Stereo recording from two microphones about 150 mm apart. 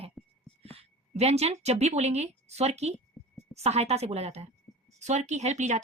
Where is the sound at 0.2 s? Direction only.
Centre (ahead or behind).